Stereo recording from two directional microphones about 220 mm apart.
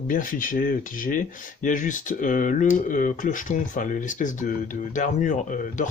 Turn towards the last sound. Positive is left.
turn(degrees=35)  # may be behind; listen again after turning